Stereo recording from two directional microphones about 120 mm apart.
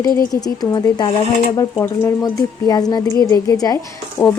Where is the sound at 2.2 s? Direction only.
35° left (ahead or behind).